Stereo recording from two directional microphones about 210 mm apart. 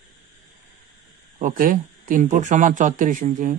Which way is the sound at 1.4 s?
40° right (ahead or behind).